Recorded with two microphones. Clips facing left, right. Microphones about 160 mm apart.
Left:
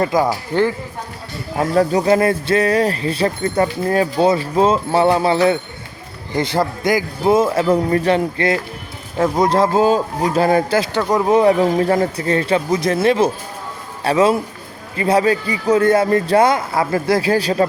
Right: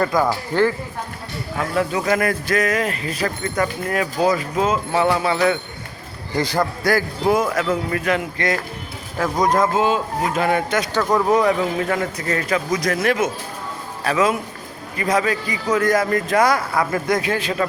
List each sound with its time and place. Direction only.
0.0 s speech: 20° left (ahead or behind)
1.5 s speech: 35° left (ahead or behind)
10.9 s speech: 20° left (ahead or behind)